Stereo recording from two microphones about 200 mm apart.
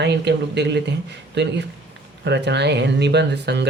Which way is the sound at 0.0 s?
60° right (ahead or behind).